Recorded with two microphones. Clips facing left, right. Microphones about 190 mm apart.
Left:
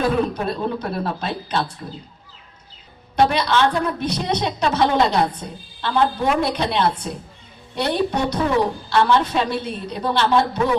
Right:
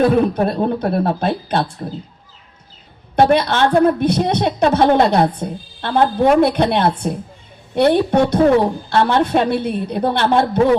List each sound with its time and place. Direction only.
0.3 s a woman's voice: 55° right (ahead or behind)
3.2 s a woman's voice: 55° right (ahead or behind)